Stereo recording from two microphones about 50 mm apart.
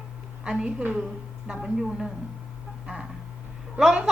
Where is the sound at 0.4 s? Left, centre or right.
Right.